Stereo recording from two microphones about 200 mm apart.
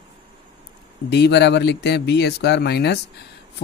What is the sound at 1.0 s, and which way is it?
Speech, 55° left (ahead or behind).